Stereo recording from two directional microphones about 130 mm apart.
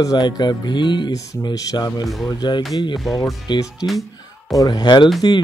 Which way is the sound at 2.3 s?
35° left (ahead or behind).